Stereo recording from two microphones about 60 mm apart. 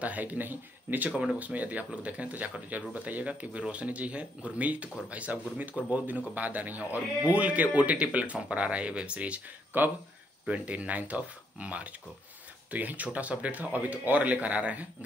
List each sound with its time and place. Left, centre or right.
0.0 s speech: right
9.7 s speech: right
10.4 s speech: right